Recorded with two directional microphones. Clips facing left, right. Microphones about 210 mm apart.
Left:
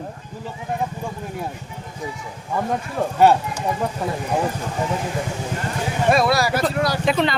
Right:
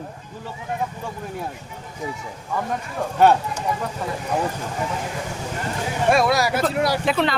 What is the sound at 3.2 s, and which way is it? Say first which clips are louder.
Speech: left 1 dB; 10° left (ahead or behind).